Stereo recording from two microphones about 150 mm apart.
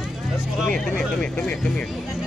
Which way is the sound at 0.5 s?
Centre (ahead or behind).